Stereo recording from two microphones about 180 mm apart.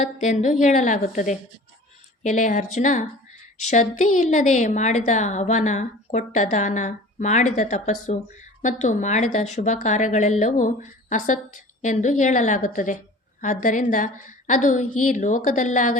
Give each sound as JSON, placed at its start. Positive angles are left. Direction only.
{"t": 0.0, "sound": "a woman's voice", "side_deg": 45}